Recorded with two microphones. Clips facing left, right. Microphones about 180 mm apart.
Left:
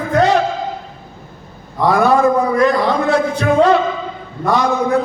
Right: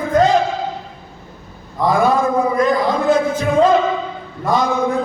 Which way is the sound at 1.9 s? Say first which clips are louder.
Left 3 dB; 75° left (ahead or behind).